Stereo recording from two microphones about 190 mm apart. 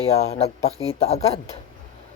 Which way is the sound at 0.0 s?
35° left (ahead or behind).